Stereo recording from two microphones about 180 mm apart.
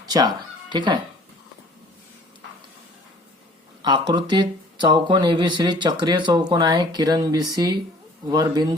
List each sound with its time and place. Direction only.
0.1 s speech: 25° right (ahead or behind)
3.8 s speech: 25° right (ahead or behind)